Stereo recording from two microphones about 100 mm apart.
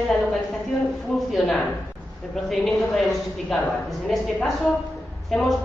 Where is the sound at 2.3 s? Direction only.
Centre (ahead or behind).